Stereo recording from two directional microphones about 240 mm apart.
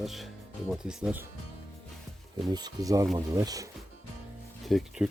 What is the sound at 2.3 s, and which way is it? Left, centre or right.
Speech, centre.